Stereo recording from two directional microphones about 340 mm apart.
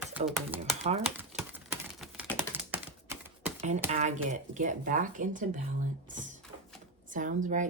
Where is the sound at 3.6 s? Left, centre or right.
Centre.